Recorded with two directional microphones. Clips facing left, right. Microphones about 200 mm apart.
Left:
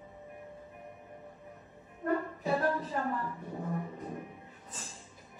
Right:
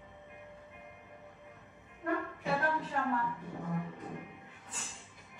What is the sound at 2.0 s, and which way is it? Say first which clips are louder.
Music: left 3 dB; 35° left (ahead or behind).